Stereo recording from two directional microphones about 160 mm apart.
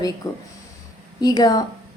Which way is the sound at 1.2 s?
25° left (ahead or behind).